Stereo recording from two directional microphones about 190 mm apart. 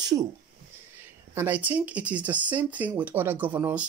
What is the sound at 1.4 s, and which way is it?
Speech, 10° right (ahead or behind).